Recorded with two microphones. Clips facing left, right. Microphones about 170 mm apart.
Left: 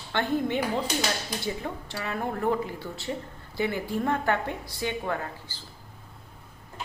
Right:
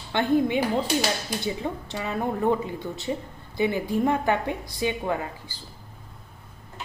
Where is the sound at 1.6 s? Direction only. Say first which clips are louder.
Right 4 dB; 20° right (ahead or behind).